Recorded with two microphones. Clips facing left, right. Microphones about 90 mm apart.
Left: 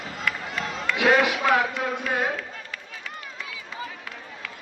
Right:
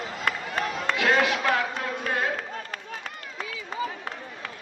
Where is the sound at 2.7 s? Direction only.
45° right (ahead or behind).